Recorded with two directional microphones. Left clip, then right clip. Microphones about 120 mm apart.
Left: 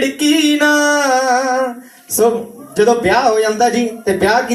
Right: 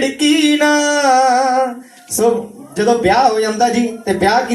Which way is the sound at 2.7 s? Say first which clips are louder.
Even; 50° left (ahead or behind).